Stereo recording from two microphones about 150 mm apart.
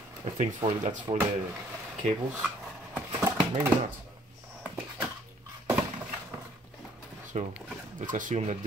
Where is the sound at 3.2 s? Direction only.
20° right (ahead or behind).